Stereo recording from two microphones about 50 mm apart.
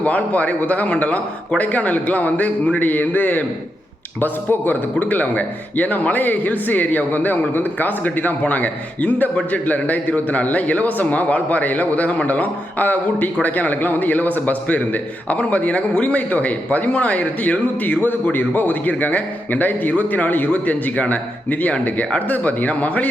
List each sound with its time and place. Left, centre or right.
0.0 s a man's voice: left
18.0 s a man's voice: left